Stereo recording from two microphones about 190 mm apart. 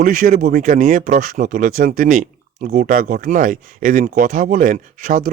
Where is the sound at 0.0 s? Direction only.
45° right (ahead or behind).